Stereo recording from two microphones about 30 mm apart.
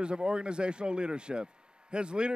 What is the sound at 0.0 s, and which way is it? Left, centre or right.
A man's voice, right.